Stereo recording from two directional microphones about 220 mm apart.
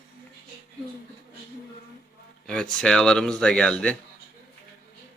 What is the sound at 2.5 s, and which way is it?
Speech, 5° left (ahead or behind).